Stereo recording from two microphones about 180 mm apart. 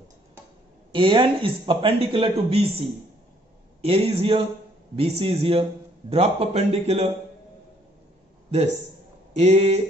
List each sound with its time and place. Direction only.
0.9 s speech: 25° right (ahead or behind)
3.8 s a man's voice: 35° right (ahead or behind)
9.3 s a man's voice: 35° right (ahead or behind)